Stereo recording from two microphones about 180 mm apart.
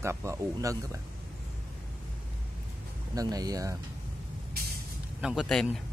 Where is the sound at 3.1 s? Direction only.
20° right (ahead or behind).